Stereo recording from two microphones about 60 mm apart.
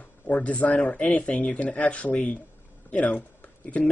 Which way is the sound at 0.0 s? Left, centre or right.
Left.